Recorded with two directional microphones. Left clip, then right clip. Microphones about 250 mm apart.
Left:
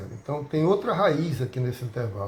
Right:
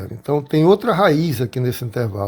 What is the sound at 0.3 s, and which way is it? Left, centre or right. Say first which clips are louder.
Speech: right 9 dB; right.